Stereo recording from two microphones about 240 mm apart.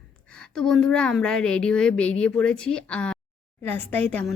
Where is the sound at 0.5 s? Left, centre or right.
Centre.